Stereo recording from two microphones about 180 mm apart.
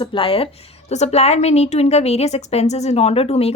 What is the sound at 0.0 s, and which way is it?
A woman's voice, 30° left (ahead or behind).